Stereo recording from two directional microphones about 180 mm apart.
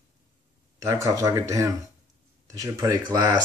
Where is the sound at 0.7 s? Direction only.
15° right (ahead or behind).